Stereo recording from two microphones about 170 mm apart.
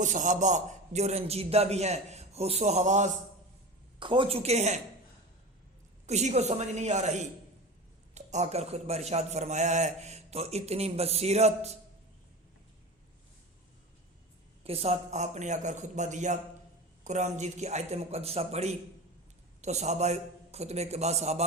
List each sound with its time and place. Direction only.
0.0 s a man's voice: 45° right (ahead or behind)
4.0 s a man's voice: 30° right (ahead or behind)
6.1 s a man's voice: 40° right (ahead or behind)
14.6 s a man's voice: 35° right (ahead or behind)